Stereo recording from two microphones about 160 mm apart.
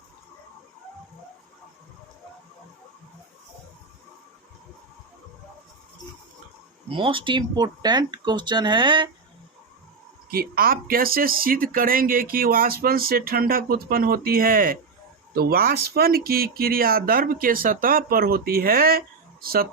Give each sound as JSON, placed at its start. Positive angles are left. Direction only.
{"t": 6.9, "sound": "speech", "side_deg": -30}
{"t": 10.3, "sound": "speech", "side_deg": -70}